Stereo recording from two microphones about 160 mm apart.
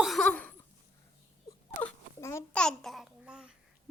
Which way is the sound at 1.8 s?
20° left (ahead or behind).